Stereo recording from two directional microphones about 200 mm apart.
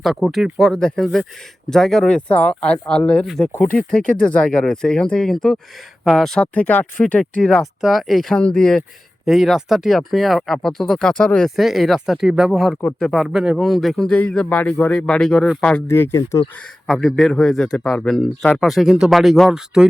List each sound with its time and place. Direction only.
0.0 s speech: centre (ahead or behind)
4.0 s speech: 45° left (ahead or behind)
4.3 s speech: 5° left (ahead or behind)
16.8 s speech: centre (ahead or behind)